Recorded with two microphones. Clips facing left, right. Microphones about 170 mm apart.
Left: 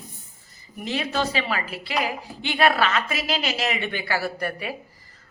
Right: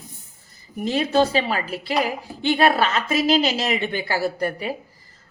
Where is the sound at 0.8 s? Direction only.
35° right (ahead or behind).